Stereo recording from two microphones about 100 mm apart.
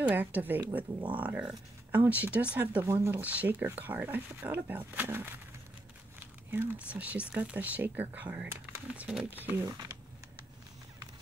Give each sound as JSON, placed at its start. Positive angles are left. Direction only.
{"t": 0.0, "sound": "speech", "side_deg": -15}
{"t": 2.8, "sound": "speech", "side_deg": -30}
{"t": 3.2, "sound": "speech", "side_deg": -15}
{"t": 9.7, "sound": "speech", "side_deg": -35}